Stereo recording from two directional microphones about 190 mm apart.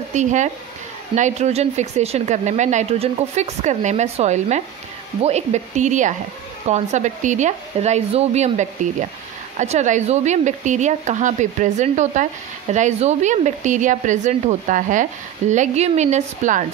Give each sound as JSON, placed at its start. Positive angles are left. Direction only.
{"t": 0.1, "sound": "a woman's voice", "side_deg": -40}